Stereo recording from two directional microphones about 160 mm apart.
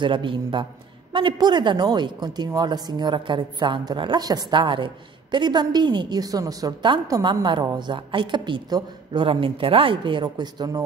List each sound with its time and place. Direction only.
0.0 s a man's voice: 30° right (ahead or behind)